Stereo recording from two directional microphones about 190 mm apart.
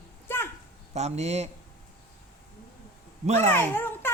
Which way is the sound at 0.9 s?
35° right (ahead or behind).